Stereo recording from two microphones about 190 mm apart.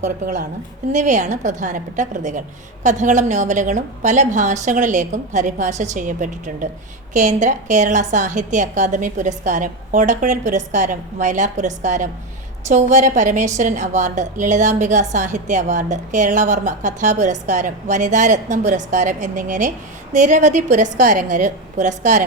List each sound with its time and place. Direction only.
0.0 s a woman's voice: 40° right (ahead or behind)